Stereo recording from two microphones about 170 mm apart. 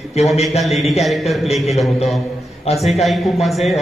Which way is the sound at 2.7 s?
40° left (ahead or behind).